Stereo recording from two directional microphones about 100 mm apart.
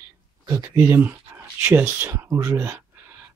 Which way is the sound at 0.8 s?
25° right (ahead or behind).